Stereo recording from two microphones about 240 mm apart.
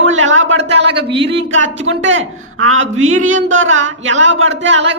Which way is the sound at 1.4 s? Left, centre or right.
Right.